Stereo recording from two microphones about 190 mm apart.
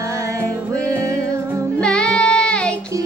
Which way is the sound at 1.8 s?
5° left (ahead or behind).